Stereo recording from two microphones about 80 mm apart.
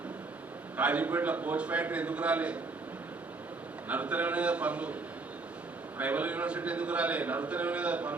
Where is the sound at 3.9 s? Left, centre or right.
Centre.